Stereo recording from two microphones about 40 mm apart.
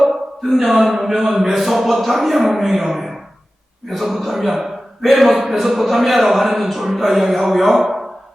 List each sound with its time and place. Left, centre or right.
0.0 s a man's voice: centre